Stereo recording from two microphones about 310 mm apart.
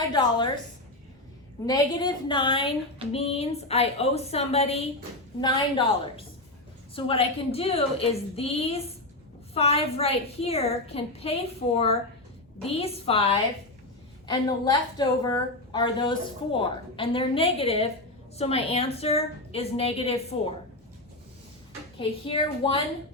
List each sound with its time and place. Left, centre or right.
0.1 s a woman's voice: centre
1.6 s a woman's voice: centre
12.6 s speech: centre
14.3 s a woman's voice: centre
21.9 s a woman's voice: centre